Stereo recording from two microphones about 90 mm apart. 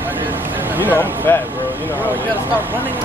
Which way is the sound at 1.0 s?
25° left (ahead or behind).